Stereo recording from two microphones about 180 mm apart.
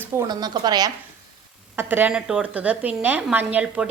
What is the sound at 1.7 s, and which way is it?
A woman's voice, 10° right (ahead or behind).